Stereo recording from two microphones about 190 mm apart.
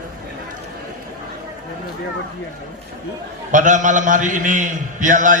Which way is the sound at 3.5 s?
40° right (ahead or behind).